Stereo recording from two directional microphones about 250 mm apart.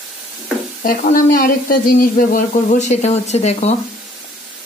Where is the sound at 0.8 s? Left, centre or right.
Left.